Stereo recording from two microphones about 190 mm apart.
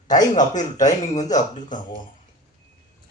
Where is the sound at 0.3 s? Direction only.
40° left (ahead or behind).